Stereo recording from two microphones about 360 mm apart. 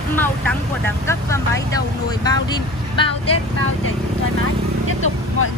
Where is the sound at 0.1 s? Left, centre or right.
Centre.